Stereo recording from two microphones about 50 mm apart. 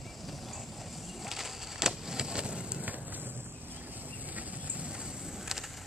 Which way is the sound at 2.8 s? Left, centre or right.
Right.